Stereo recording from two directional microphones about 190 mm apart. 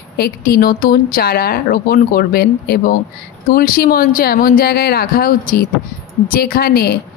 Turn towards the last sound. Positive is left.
turn(degrees=55)  # may be behind; listen again after turning